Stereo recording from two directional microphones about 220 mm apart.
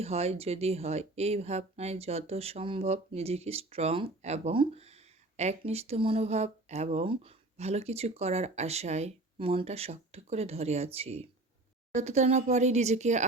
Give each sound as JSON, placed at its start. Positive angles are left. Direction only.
{"t": 0.0, "sound": "speech", "side_deg": -30}